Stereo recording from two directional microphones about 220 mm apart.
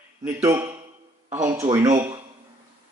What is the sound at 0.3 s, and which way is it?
Speech, 10° right (ahead or behind).